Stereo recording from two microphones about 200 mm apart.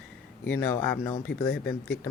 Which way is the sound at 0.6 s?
10° left (ahead or behind).